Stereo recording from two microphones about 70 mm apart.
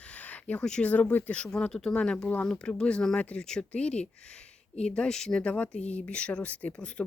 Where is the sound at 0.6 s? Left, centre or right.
Centre.